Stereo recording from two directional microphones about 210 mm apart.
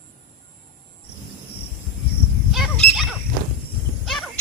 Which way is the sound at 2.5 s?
Centre (ahead or behind).